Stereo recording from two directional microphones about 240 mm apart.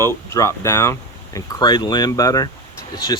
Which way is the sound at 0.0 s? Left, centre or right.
Centre.